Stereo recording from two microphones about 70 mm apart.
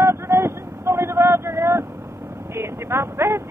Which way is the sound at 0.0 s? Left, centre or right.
Right.